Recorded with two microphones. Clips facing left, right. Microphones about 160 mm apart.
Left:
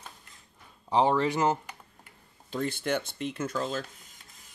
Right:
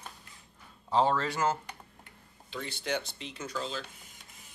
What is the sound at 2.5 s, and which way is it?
Speech, 50° left (ahead or behind).